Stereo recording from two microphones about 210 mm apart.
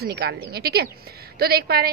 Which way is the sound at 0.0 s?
50° right (ahead or behind).